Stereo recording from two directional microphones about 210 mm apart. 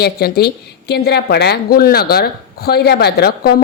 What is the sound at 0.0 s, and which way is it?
A woman's voice, 50° left (ahead or behind).